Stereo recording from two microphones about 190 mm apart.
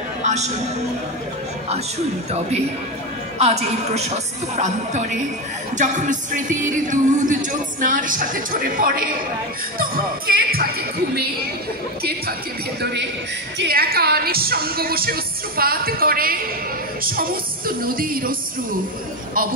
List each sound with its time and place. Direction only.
0.2 s music: 35° right (ahead or behind)
3.3 s a woman's voice: 35° right (ahead or behind)
5.8 s music: 40° right (ahead or behind)
12.0 s speech: 55° right (ahead or behind)
13.6 s music: 55° right (ahead or behind)